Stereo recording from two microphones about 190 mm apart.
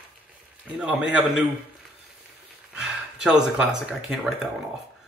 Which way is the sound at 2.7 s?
5° right (ahead or behind).